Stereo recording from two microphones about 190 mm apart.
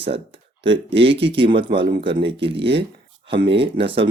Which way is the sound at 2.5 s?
65° right (ahead or behind).